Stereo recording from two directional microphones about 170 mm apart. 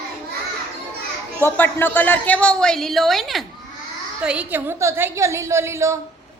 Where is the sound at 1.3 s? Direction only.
10° left (ahead or behind); by 5.9 s 15° right (ahead or behind).